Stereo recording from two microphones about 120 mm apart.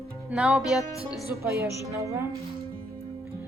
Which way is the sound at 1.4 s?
25° right (ahead or behind).